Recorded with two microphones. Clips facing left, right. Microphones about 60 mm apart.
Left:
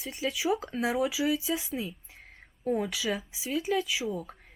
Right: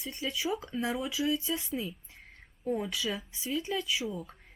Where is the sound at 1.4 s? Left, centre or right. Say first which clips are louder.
Left 2 dB; centre.